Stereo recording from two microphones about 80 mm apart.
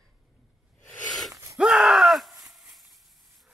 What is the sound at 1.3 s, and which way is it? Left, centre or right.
Gasp, right.